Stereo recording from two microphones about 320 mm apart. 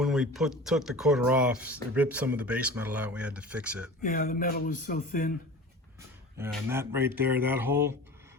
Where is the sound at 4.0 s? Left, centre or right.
Left.